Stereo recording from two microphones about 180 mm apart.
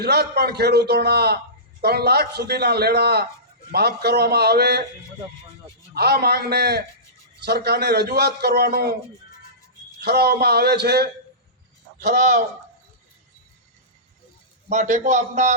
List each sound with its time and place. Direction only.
0.0 s a man's voice: 65° right (ahead or behind)
5.9 s a man's voice: 65° right (ahead or behind)
10.0 s a man's voice: 65° right (ahead or behind)
11.9 s speech: 45° right (ahead or behind)
14.7 s a man's voice: 40° right (ahead or behind)